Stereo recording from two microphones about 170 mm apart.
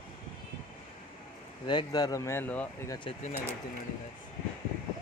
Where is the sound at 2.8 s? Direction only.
25° left (ahead or behind).